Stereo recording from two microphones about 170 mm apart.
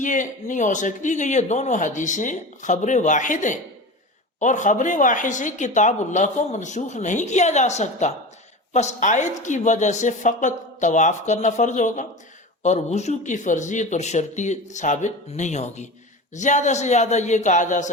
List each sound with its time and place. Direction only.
0.0 s speech: 50° left (ahead or behind)